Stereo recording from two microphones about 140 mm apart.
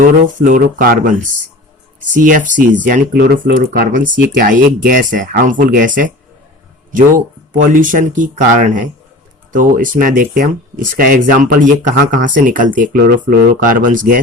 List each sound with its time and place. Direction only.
0.0 s speech: 75° right (ahead or behind)
2.0 s speech: 70° right (ahead or behind)